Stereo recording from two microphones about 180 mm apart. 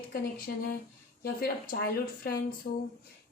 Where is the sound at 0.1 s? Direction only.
55° left (ahead or behind).